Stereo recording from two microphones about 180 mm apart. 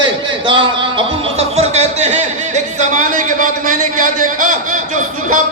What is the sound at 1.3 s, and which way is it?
A man's voice, 35° right (ahead or behind).